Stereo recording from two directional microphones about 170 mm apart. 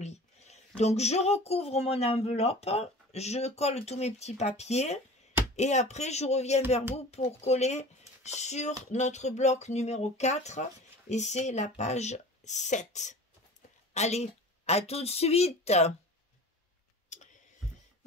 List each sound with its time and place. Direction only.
0.0 s speech: 40° left (ahead or behind)
17.1 s clicking: 45° left (ahead or behind)